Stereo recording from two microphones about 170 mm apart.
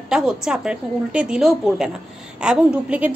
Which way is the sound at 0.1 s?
5° right (ahead or behind).